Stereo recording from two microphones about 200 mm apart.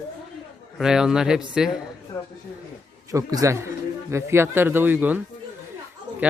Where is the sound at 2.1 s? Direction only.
15° left (ahead or behind).